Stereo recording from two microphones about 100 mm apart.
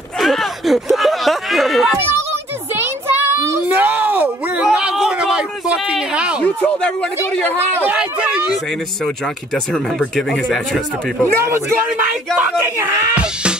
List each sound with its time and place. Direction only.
0.2 s a sound: centre (ahead or behind)
2.7 s child singing: 20° right (ahead or behind)
3.6 s a sound: 15° right (ahead or behind)
6.4 s speech: 15° left (ahead or behind)
7.9 s speech: 10° right (ahead or behind)
9.0 s speech: 5° left (ahead or behind)
11.4 s speech: 25° right (ahead or behind)
13.2 s music: 10° right (ahead or behind)